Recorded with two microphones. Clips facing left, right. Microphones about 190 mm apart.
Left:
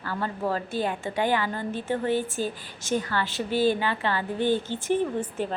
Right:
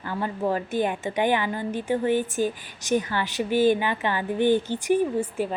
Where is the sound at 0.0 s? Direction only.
15° right (ahead or behind).